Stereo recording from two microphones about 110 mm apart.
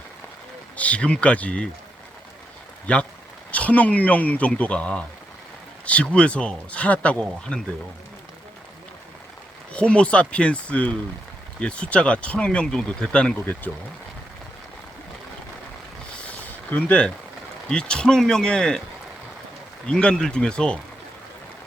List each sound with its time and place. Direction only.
0.8 s speech: 10° left (ahead or behind)
2.8 s speech: 10° left (ahead or behind)
9.7 s speech: 10° left (ahead or behind)
16.6 s speech: 15° left (ahead or behind)
19.9 s speech: 5° left (ahead or behind)